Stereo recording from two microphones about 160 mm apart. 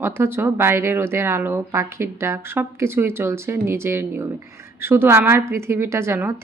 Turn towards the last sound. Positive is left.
turn(degrees=-15)  # may be behind; listen again after turning